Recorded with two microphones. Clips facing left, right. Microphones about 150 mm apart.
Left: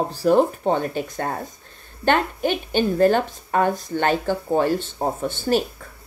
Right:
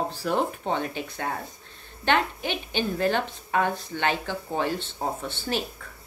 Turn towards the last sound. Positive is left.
turn(degrees=45)  # may be behind; listen again after turning